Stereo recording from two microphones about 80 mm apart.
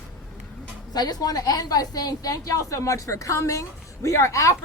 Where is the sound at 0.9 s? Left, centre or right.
Left.